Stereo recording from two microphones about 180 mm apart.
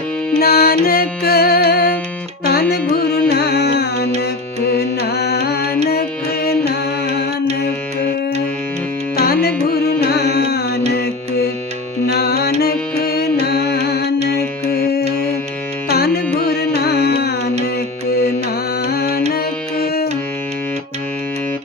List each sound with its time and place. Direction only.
0.3 s music: 60° left (ahead or behind)
9.1 s music: 60° left (ahead or behind)
16.4 s carnatic music: 65° left (ahead or behind)
18.4 s music: 60° left (ahead or behind)